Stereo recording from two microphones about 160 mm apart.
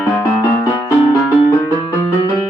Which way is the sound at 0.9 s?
20° left (ahead or behind).